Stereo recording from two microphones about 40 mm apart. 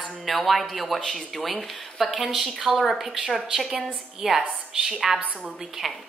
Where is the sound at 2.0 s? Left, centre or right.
Centre.